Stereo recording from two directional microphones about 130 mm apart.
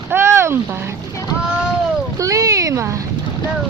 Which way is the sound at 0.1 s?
20° right (ahead or behind).